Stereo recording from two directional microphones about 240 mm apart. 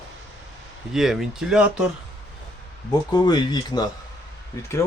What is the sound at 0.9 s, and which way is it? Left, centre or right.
Speech, centre.